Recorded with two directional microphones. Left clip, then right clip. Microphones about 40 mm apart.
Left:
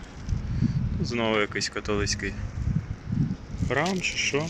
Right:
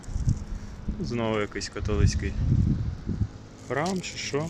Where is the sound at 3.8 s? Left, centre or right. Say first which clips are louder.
Left 2 dB; centre.